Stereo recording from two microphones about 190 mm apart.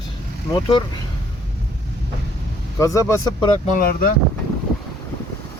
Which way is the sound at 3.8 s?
50° left (ahead or behind).